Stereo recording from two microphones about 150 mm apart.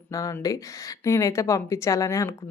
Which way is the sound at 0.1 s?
20° left (ahead or behind).